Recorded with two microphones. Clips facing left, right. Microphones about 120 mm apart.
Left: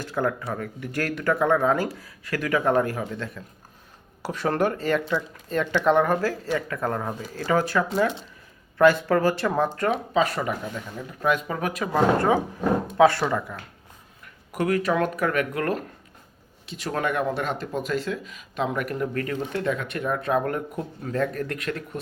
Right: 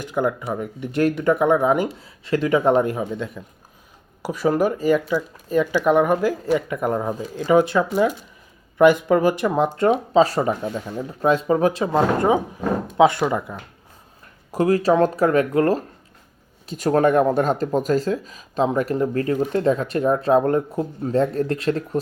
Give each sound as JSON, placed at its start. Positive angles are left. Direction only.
{"t": 0.0, "sound": "speech", "side_deg": -15}
{"t": 11.9, "sound": "speech", "side_deg": -20}
{"t": 14.5, "sound": "speech", "side_deg": -30}
{"t": 16.6, "sound": "speech", "side_deg": -45}